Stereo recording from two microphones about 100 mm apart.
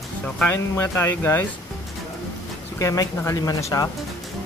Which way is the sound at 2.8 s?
30° left (ahead or behind).